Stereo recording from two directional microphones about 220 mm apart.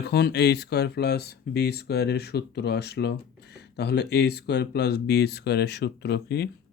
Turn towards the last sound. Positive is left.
turn(degrees=50)  # may be behind; listen again after turning